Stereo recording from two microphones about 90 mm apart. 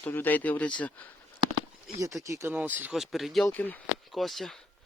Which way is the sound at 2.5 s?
20° right (ahead or behind).